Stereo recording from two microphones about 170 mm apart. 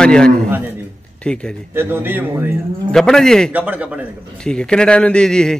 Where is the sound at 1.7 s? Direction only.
15° right (ahead or behind).